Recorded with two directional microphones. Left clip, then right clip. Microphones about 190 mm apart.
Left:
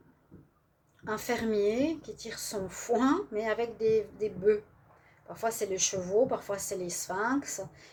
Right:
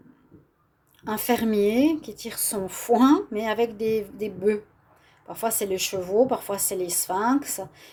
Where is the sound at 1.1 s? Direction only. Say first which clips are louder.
Right 7 dB; 50° right (ahead or behind).